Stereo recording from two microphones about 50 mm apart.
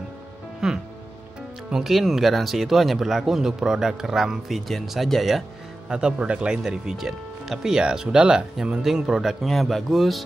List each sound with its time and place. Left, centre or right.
0.6 s music: centre
1.7 s speech: centre
5.9 s speech: centre
6.7 s speech: centre